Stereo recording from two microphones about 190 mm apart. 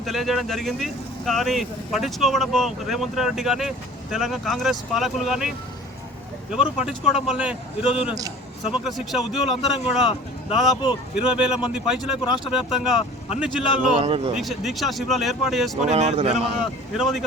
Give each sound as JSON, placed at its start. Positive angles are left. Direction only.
{"t": 0.0, "sound": "speech", "side_deg": 0}
{"t": 6.5, "sound": "speech", "side_deg": -5}
{"t": 7.9, "sound": "a man's voice", "side_deg": 30}
{"t": 8.7, "sound": "a man's voice", "side_deg": 0}
{"t": 14.0, "sound": "speech", "side_deg": -30}
{"t": 14.3, "sound": "speech", "side_deg": 0}
{"t": 15.8, "sound": "speech", "side_deg": -35}
{"t": 17.0, "sound": "speech", "side_deg": 0}